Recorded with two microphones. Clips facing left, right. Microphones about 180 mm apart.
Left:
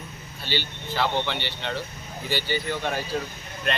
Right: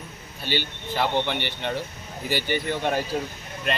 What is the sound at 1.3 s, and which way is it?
Speech, 50° right (ahead or behind).